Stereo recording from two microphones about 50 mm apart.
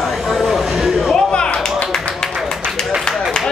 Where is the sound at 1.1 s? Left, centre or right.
Centre.